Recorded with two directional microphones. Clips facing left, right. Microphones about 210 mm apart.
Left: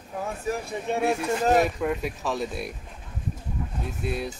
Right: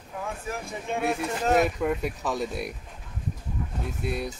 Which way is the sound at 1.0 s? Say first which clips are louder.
Left 2 dB; 30° left (ahead or behind).